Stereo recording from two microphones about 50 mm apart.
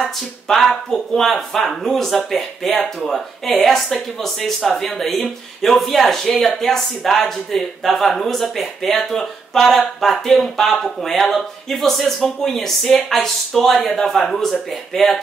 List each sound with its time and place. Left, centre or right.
0.0 s speech: centre